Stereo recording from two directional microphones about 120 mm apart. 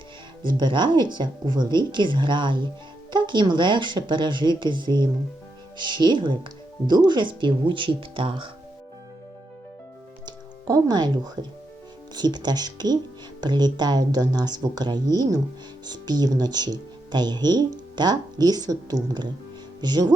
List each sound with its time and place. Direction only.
0.4 s speech: 40° right (ahead or behind)
10.2 s music: 35° right (ahead or behind)
12.1 s speech: 35° right (ahead or behind)